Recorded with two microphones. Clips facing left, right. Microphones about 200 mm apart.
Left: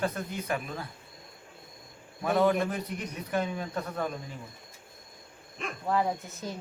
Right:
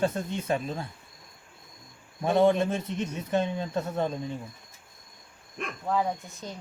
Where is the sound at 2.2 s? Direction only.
25° right (ahead or behind).